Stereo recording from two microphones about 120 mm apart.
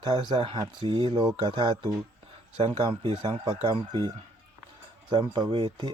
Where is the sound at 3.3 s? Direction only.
35° right (ahead or behind).